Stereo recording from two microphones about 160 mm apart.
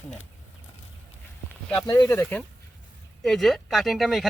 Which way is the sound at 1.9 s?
25° left (ahead or behind).